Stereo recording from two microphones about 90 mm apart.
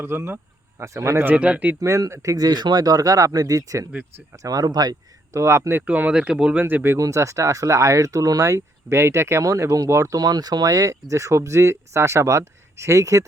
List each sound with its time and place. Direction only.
0.0 s speech: 30° right (ahead or behind)
1.3 s speech: 15° right (ahead or behind)
1.8 s speech: 35° right (ahead or behind)
5.4 s speech: 30° right (ahead or behind)
7.0 s speech: 35° right (ahead or behind)
10.2 s speech: 45° right (ahead or behind)